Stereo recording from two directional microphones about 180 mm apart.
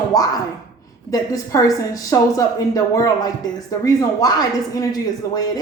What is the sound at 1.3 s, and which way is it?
Speech, 20° left (ahead or behind).